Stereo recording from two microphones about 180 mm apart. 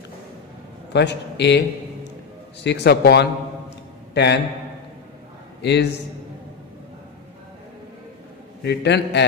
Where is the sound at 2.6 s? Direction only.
65° left (ahead or behind).